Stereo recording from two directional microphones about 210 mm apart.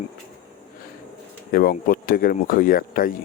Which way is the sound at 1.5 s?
45° left (ahead or behind).